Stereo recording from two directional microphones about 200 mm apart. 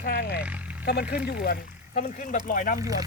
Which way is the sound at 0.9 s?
55° left (ahead or behind).